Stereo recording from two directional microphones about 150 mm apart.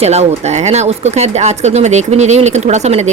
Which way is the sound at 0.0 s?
45° right (ahead or behind).